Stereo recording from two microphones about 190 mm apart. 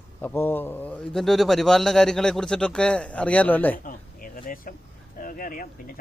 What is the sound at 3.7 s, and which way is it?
Speech, 45° left (ahead or behind).